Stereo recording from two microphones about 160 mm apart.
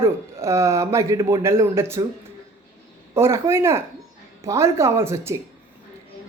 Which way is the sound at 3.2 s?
15° right (ahead or behind).